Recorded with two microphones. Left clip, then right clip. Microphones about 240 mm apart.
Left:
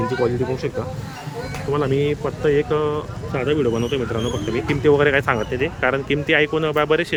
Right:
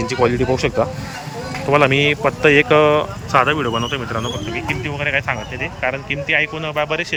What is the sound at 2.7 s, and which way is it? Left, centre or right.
Speech, right.